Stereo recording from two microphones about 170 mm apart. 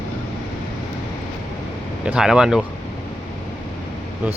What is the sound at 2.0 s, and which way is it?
Speech, 5° right (ahead or behind).